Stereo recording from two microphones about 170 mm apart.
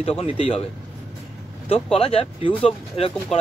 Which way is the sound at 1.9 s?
30° left (ahead or behind).